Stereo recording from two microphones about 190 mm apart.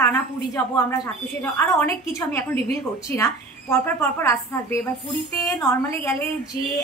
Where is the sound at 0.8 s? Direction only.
15° left (ahead or behind).